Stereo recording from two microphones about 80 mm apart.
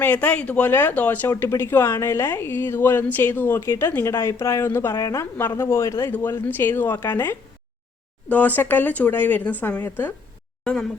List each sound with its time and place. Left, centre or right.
0.0 s a woman's voice: left
10.6 s speech: centre